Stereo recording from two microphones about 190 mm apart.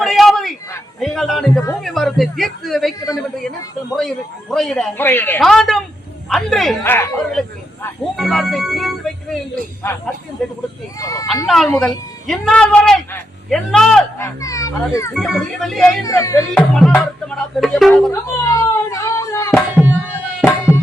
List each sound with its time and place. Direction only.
0.0 s a sound: centre (ahead or behind)
0.9 s speech: centre (ahead or behind)
4.5 s speech: centre (ahead or behind)
8.1 s music: centre (ahead or behind)
10.4 s speech: centre (ahead or behind)
11.0 s speech: 15° left (ahead or behind)
11.4 s speech: centre (ahead or behind)
14.2 s a child's voice: 15° left (ahead or behind)
15.1 s speech: centre (ahead or behind)
16.0 s speech: 15° left (ahead or behind)
16.6 s speech: 5° left (ahead or behind)
18.1 s a sound: 15° left (ahead or behind)
19.5 s tabla: 10° right (ahead or behind)